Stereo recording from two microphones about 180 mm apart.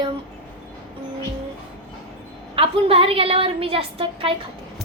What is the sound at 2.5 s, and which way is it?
A woman's voice, 30° right (ahead or behind).